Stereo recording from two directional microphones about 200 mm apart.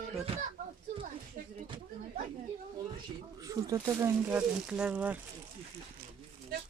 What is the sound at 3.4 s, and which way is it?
Speech, 15° right (ahead or behind).